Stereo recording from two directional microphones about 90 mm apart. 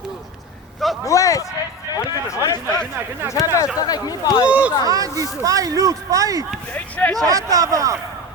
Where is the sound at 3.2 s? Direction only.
25° right (ahead or behind).